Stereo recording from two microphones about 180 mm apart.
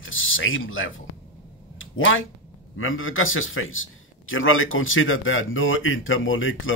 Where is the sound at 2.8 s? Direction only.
90° left.